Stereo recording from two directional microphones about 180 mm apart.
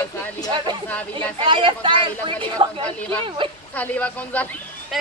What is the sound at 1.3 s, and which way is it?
Speech, 30° right (ahead or behind).